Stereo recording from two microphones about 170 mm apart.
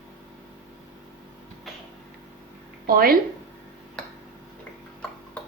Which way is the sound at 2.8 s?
60° right (ahead or behind).